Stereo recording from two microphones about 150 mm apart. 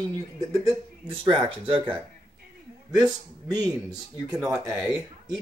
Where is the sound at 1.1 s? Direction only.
35° right (ahead or behind).